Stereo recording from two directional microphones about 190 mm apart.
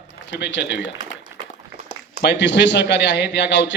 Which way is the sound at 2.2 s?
70° left (ahead or behind).